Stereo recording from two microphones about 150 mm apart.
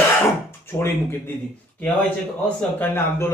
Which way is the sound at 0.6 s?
15° left (ahead or behind).